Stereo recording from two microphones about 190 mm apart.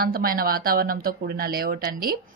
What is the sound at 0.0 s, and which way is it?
Speech, 50° right (ahead or behind).